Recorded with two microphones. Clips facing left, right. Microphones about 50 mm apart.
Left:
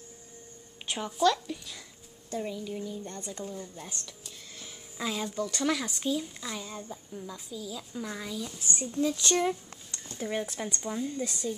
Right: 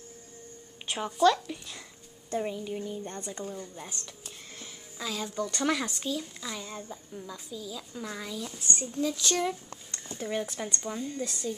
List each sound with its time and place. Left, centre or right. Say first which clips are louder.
0.8 s speech: right 2 dB; centre
2.3 s speech: right 2 dB; right; by 4.0 s centre
4.9 s speech: left 2 dB; centre
5.3 s speech: right 3 dB; centre
5.9 s a woman's voice: left 3 dB; centre